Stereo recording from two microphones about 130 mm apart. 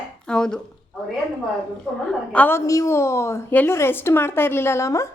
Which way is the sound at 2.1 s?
10° left (ahead or behind).